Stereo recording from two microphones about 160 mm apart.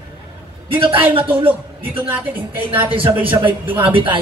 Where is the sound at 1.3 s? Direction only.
10° right (ahead or behind).